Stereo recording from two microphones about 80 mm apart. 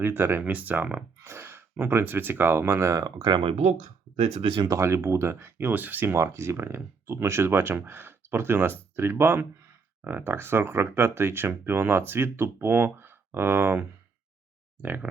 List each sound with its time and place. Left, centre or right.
0.0 s speech: right
1.2 s speech: right
3.2 s speech: right
4.4 s speech: right
4.7 s speech: right
6.1 s speech: right